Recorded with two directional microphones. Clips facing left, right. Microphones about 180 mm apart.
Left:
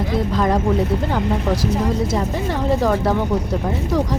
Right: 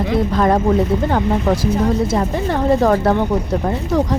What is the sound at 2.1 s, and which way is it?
Speech, 55° right (ahead or behind).